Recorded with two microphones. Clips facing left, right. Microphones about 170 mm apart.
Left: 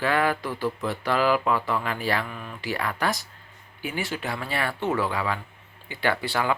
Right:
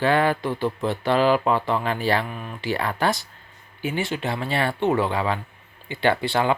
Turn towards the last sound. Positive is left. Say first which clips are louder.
# right 4 dB
turn(degrees=-25)  # may be behind; listen again after turning